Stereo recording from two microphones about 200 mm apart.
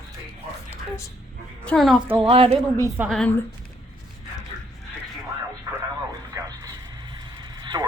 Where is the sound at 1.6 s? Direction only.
Centre (ahead or behind).